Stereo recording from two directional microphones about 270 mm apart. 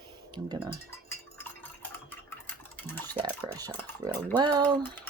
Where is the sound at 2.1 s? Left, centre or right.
Centre.